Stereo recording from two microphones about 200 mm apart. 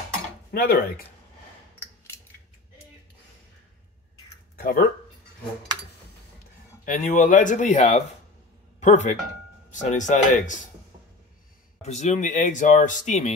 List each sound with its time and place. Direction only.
0.5 s speech: 50° left (ahead or behind)
4.6 s speech: 50° left (ahead or behind)
6.8 s speech: 40° left (ahead or behind)
11.8 s speech: 35° left (ahead or behind)